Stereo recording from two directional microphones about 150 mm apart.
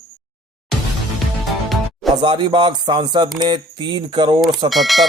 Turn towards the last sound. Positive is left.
turn(degrees=0)  # may be behind; listen again after turning